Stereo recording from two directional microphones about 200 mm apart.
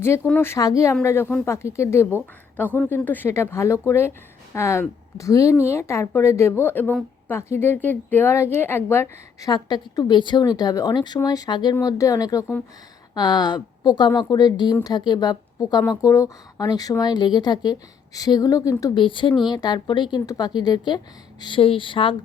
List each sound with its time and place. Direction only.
0.0 s a woman's voice: 10° left (ahead or behind)